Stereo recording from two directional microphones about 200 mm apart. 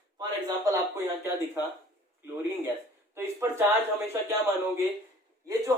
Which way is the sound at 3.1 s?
10° right (ahead or behind).